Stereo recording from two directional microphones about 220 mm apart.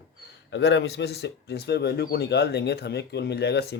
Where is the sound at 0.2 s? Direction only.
50° left (ahead or behind).